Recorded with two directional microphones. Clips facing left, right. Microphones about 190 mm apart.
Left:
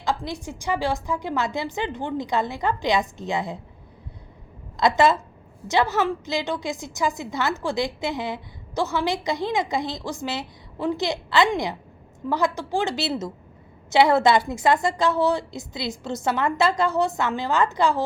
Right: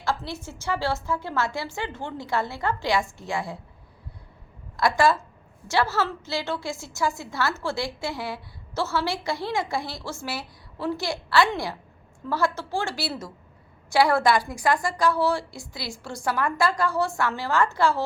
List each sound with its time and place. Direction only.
0.0 s a woman's voice: 15° left (ahead or behind)
4.8 s a woman's voice: 20° left (ahead or behind)